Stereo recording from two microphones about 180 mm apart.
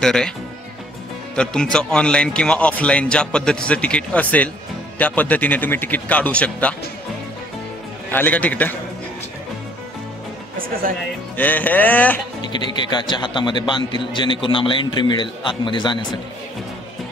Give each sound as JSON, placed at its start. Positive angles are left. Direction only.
{"t": 0.0, "sound": "a man's voice", "side_deg": 5}
{"t": 1.3, "sound": "a man's voice", "side_deg": 5}
{"t": 8.1, "sound": "a man's voice", "side_deg": 10}
{"t": 11.3, "sound": "a man's voice", "side_deg": 10}
{"t": 12.4, "sound": "a man's voice", "side_deg": 25}